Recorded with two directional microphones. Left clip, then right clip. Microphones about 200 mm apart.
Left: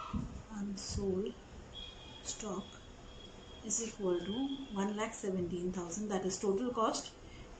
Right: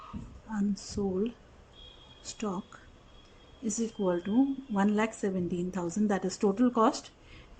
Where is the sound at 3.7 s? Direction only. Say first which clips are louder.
Right 5 dB; 60° right (ahead or behind).